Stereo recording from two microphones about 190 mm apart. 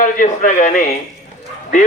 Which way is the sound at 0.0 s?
45° left (ahead or behind).